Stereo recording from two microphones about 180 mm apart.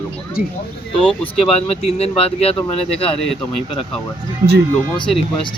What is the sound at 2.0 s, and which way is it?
Speech, 35° left (ahead or behind).